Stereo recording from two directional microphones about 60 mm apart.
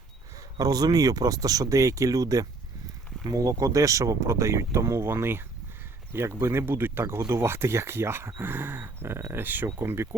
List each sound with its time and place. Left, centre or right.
0.6 s speech: right
3.3 s speech: right
9.4 s speech: right